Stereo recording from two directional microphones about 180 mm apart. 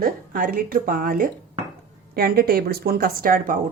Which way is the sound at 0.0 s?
50° right (ahead or behind).